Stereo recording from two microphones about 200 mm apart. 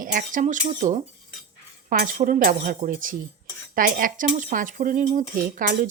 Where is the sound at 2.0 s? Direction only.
45° right (ahead or behind).